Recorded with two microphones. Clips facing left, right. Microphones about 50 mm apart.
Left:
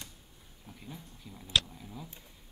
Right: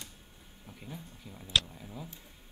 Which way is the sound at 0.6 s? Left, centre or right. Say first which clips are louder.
Right 1 dB; centre.